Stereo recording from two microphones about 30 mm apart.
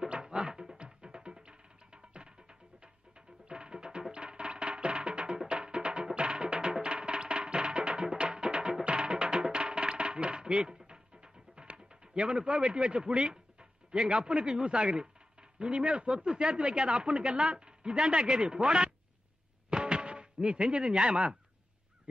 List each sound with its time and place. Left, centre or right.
0.2 s music: right
13.0 s a man's voice: right
19.7 s music: right